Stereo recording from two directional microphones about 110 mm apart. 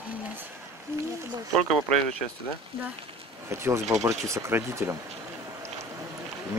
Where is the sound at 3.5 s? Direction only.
25° right (ahead or behind).